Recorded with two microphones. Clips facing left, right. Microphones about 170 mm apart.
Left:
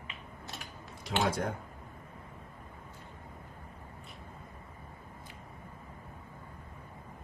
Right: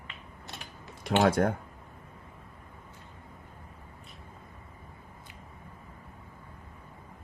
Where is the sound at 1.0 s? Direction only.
60° right (ahead or behind).